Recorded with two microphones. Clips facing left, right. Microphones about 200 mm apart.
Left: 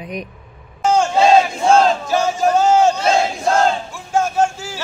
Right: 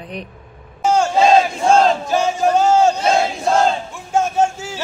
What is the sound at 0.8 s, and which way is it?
Battle cry, 10° right (ahead or behind).